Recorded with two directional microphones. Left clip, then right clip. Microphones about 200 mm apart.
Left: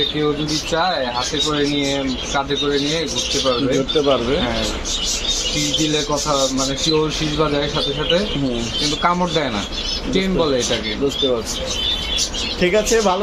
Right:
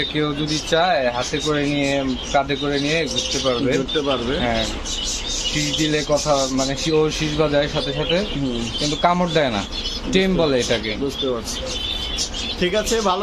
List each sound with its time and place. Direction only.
1.5 s speech: 35° right (ahead or behind)
9.0 s speech: 45° right (ahead or behind)
12.6 s speech: 5° right (ahead or behind)